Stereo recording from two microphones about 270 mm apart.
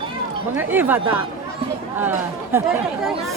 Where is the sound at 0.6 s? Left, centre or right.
Centre.